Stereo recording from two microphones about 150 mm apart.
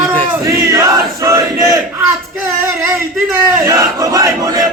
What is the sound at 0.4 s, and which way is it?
Battle cry, 20° right (ahead or behind).